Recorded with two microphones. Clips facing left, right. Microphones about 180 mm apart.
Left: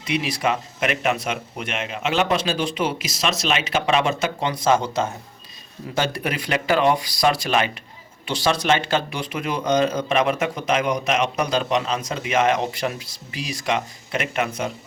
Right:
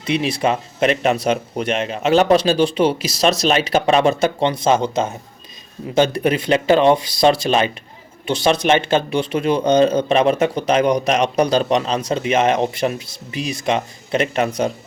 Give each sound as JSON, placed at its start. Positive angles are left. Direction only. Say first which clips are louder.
{"t": 0.0, "sound": "speech", "louder": "right 4 dB", "side_deg": -25}
{"t": 4.4, "sound": "speech", "louder": "right 4 dB", "side_deg": -25}